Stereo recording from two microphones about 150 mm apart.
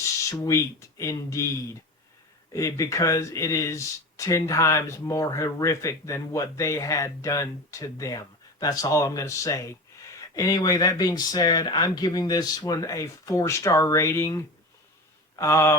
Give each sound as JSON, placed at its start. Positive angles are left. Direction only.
{"t": 0.0, "sound": "speech", "side_deg": 20}